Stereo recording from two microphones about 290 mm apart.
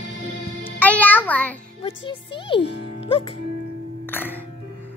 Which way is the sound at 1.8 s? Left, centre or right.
Centre.